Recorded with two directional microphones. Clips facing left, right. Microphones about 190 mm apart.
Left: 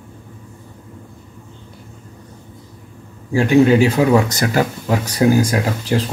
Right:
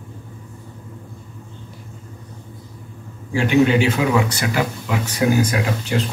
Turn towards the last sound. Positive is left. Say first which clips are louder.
# left 3 dB
turn(degrees=35)  # may be behind; listen again after turning